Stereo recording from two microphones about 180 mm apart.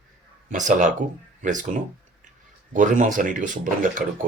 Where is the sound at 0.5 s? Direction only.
45° right (ahead or behind).